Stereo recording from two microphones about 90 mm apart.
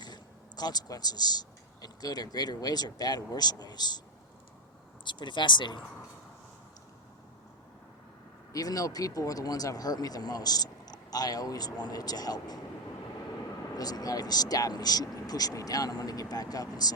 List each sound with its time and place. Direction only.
0.0 s a man's voice: 50° left (ahead or behind)
5.0 s speech: 60° left (ahead or behind)
8.5 s speech: 40° left (ahead or behind)
13.7 s speech: 45° left (ahead or behind)